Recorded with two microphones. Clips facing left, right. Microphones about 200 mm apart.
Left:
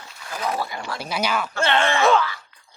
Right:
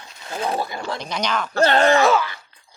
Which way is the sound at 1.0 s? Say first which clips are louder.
Left 2 dB; 5° left (ahead or behind).